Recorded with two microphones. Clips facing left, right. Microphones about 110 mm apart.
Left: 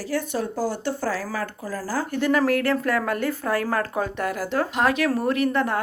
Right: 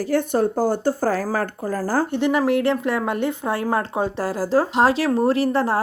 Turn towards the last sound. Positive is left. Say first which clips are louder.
# right 3 dB
turn(degrees=-30)  # may be behind; listen again after turning